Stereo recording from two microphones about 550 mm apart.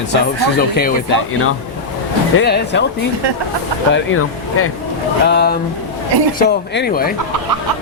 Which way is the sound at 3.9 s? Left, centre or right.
Left.